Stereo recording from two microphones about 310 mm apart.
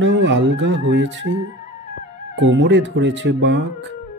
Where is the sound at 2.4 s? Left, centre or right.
Right.